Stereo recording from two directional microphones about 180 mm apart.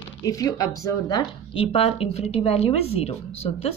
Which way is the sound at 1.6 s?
30° left (ahead or behind).